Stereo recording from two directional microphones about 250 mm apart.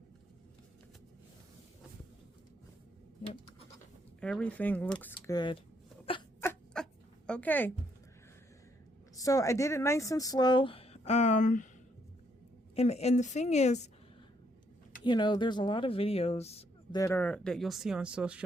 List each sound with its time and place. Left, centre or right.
4.2 s speech: centre
6.4 s a sound: centre
7.3 s a woman's voice: centre
9.1 s a woman's voice: centre; by 11.7 s left
12.7 s speech: left
15.0 s speech: centre
17.0 s speech: centre